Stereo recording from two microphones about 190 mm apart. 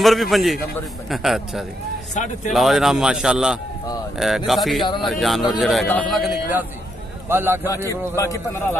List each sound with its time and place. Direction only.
0.0 s a man's voice: centre (ahead or behind)
2.1 s speech: 40° left (ahead or behind)
2.5 s a man's voice: centre (ahead or behind)
7.2 s a man's voice: 10° right (ahead or behind)
7.6 s a man's voice: 15° left (ahead or behind)